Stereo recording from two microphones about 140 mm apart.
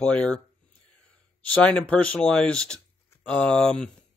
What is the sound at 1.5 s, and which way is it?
Speech, 10° left (ahead or behind).